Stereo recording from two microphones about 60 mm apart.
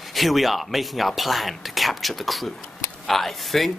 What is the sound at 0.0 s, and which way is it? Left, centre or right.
Speech, centre.